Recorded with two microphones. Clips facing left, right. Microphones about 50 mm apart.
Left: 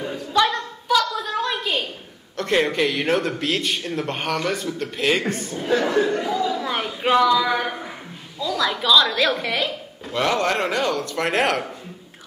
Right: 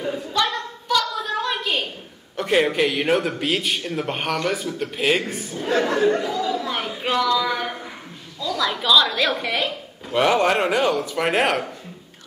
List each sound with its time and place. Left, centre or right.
0.0 s a capella: centre
0.5 s a sound: centre
2.3 s a man's voice: centre
10.1 s a man's voice: centre